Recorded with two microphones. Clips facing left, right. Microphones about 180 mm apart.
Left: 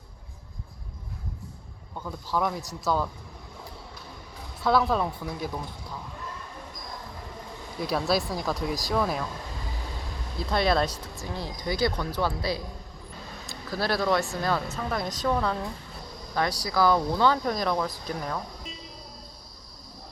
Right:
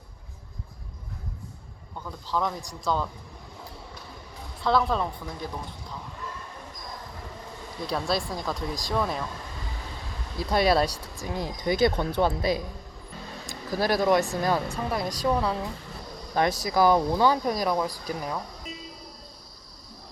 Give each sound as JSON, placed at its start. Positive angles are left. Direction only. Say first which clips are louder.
{"t": 2.0, "sound": "a man's voice", "louder": "left 1 dB", "side_deg": 10}
{"t": 4.6, "sound": "a man's voice", "louder": "left 1 dB", "side_deg": 5}
{"t": 7.8, "sound": "speech", "louder": "left 2 dB", "side_deg": 5}
{"t": 10.5, "sound": "a woman's voice", "louder": "right 2 dB", "side_deg": -10}
{"t": 16.3, "sound": "speech", "louder": "right 3 dB", "side_deg": -20}